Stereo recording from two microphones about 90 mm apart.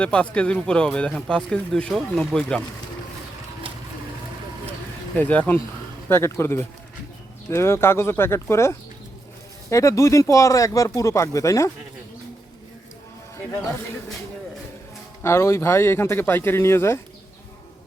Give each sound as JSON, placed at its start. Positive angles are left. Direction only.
{"t": 0.0, "sound": "speech", "side_deg": 10}
{"t": 5.1, "sound": "speech", "side_deg": 20}
{"t": 6.1, "sound": "speech", "side_deg": 30}
{"t": 15.2, "sound": "speech", "side_deg": 30}